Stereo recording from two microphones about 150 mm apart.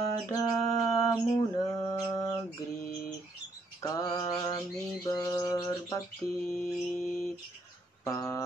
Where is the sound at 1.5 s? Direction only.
20° left (ahead or behind).